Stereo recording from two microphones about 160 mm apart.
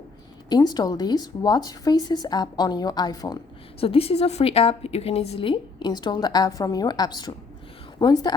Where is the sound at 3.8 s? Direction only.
35° left (ahead or behind).